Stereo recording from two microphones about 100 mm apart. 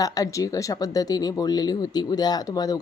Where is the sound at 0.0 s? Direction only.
35° left (ahead or behind).